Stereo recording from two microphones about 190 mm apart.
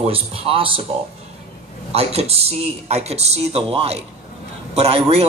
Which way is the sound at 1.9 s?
30° right (ahead or behind).